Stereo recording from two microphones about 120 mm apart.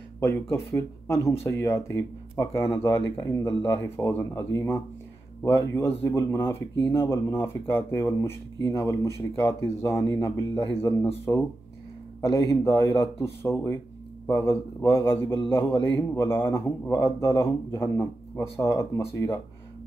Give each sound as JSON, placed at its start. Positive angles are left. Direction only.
{"t": 0.2, "sound": "speech", "side_deg": 20}